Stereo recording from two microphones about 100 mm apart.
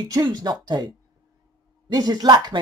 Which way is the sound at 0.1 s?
40° right (ahead or behind).